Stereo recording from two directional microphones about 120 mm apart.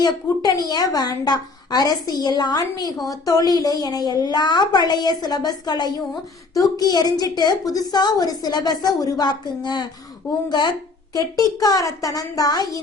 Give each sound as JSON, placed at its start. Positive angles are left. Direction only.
{"t": 0.0, "sound": "a woman's voice", "side_deg": 35}
{"t": 11.1, "sound": "a woman's voice", "side_deg": 30}